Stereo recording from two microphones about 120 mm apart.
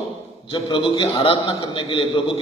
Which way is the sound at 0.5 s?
45° left (ahead or behind).